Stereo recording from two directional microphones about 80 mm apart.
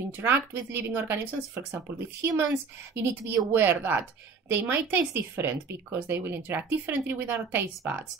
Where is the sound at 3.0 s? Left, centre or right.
Right.